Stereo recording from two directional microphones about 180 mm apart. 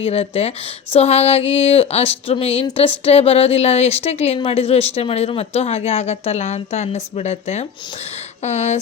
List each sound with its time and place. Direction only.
0.0 s a woman's voice: 30° left (ahead or behind)